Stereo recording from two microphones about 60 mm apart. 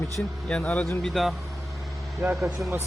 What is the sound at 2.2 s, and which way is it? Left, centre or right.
Speech, right.